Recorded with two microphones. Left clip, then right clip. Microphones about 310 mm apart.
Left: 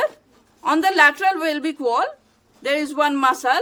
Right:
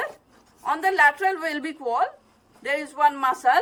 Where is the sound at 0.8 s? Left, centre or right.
Centre.